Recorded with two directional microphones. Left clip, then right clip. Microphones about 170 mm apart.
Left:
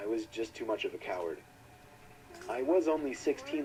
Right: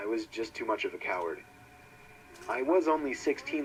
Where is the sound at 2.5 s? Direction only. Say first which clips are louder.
Right 2 dB; 25° right (ahead or behind).